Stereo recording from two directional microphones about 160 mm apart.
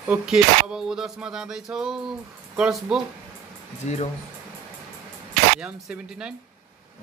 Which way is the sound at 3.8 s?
45° left (ahead or behind).